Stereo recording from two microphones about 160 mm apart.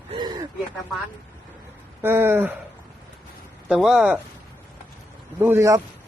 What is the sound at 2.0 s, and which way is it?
Speech, 15° right (ahead or behind).